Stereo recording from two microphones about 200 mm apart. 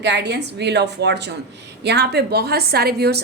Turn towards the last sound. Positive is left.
turn(degrees=-55)  # may be behind; listen again after turning